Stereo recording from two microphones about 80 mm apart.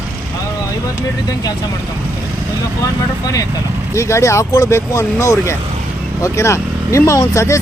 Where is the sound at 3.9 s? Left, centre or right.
Left.